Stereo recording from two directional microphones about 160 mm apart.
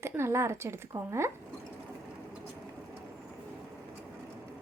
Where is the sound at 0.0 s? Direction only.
15° right (ahead or behind).